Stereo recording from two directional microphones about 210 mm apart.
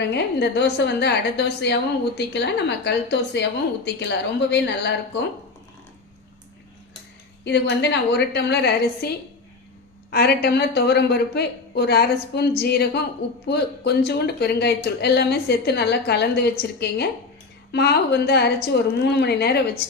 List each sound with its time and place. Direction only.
0.0 s a woman's voice: 55° left (ahead or behind)
7.4 s a woman's voice: 55° left (ahead or behind)